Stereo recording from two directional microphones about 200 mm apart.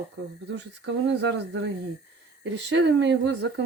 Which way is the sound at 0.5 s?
60° right (ahead or behind).